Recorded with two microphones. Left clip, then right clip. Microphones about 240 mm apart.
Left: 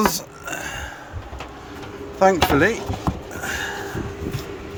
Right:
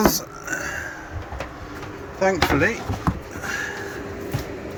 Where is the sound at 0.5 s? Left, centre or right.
Centre.